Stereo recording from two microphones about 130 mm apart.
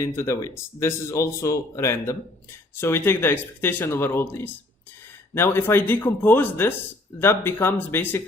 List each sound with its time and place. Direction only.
0.0 s speech: 20° left (ahead or behind)